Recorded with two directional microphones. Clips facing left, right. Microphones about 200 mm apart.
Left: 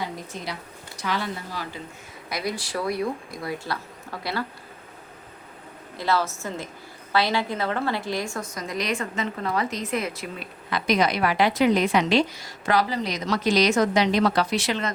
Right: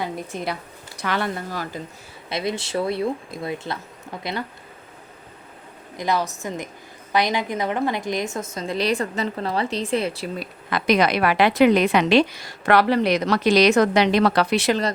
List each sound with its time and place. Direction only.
0.3 s a woman's voice: 55° right (ahead or behind)
2.3 s a woman's voice: 25° right (ahead or behind)
6.0 s a woman's voice: 15° right (ahead or behind); by 10.5 s 35° right (ahead or behind)
10.7 s a woman's voice: 60° right (ahead or behind)